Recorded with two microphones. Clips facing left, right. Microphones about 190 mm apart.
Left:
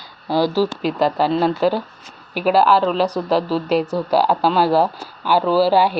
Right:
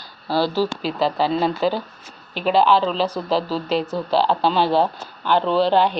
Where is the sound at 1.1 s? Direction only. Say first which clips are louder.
Left 3 dB; 5° left (ahead or behind).